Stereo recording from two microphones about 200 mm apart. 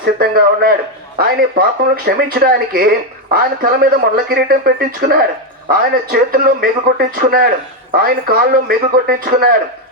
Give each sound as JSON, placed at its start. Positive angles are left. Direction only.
{"t": 0.0, "sound": "speech", "side_deg": -50}